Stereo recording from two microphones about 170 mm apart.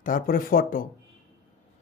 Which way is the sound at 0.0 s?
55° left (ahead or behind).